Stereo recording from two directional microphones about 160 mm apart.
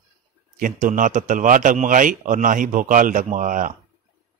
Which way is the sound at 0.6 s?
55° right (ahead or behind).